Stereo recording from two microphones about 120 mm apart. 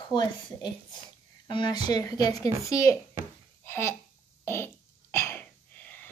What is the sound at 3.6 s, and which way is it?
Babbling, 20° left (ahead or behind).